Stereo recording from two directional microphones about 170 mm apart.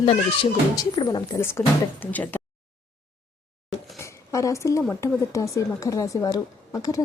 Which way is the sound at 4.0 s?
15° left (ahead or behind).